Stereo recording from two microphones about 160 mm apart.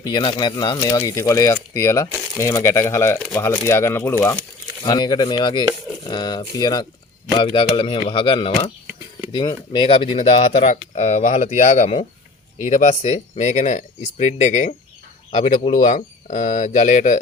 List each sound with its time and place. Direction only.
0.0 s speech: 30° left (ahead or behind); by 17.2 s 50° left (ahead or behind)